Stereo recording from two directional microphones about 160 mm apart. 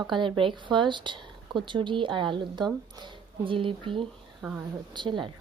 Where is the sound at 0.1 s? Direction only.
30° right (ahead or behind).